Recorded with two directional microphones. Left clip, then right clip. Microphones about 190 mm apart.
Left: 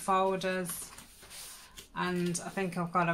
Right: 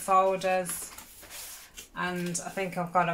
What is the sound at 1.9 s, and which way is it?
Speech, 25° left (ahead or behind).